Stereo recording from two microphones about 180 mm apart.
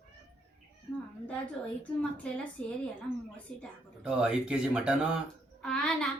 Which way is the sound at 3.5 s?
5° left (ahead or behind).